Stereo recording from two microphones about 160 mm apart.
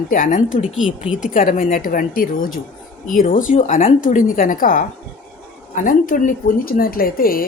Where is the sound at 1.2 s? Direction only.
55° left (ahead or behind).